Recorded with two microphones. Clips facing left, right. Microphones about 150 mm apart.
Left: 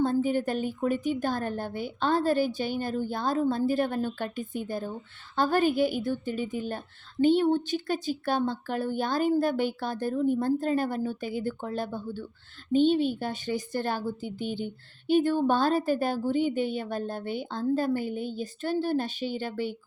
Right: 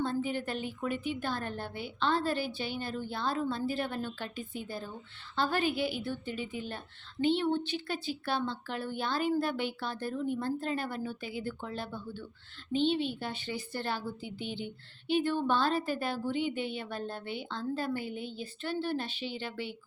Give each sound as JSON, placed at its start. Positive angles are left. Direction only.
{"t": 0.0, "sound": "a woman's voice", "side_deg": 45}